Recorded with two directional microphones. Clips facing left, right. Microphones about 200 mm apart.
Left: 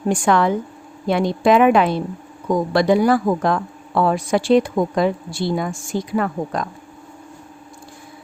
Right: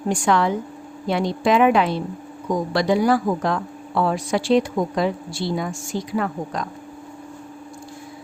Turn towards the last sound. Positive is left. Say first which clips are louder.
# left 3 dB
turn(degrees=50)  # may be behind; listen again after turning